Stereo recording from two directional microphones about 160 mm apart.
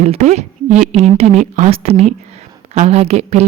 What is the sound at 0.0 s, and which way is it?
A woman's voice, 45° right (ahead or behind).